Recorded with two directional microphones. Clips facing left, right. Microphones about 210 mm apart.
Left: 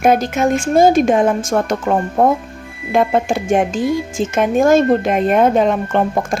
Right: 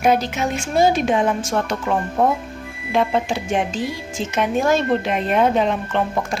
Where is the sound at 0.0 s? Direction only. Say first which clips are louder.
Left 5 dB; 50° left (ahead or behind).